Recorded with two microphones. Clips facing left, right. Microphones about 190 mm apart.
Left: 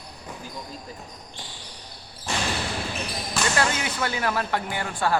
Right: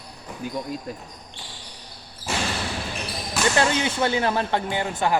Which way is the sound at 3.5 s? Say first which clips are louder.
Right 5 dB; 25° right (ahead or behind).